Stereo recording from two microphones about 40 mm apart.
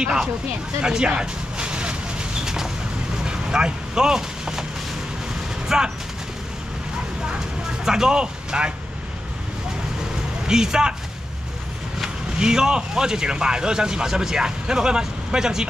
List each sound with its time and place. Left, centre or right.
0.0 s speech: right
0.8 s a sound: right
3.3 s artillery fire: centre
5.7 s speech: centre
7.3 s speech: centre
10.4 s speech: centre
12.0 s speech: centre